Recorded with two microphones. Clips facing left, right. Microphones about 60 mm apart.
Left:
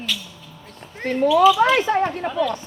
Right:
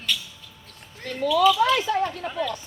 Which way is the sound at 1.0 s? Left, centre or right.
Left.